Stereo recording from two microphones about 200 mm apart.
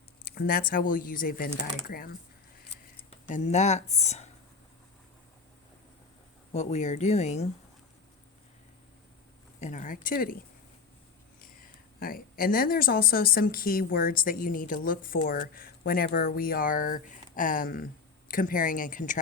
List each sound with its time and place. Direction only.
0.3 s speech: 50° left (ahead or behind)
3.2 s speech: 35° left (ahead or behind)
6.5 s speech: 35° left (ahead or behind)
9.6 s speech: 35° left (ahead or behind)
11.9 s speech: 45° left (ahead or behind)